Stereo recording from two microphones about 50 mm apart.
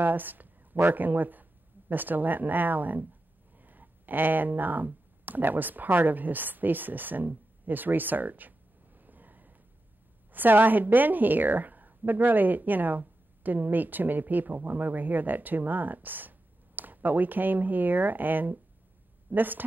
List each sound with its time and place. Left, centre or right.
0.0 s a woman's voice: right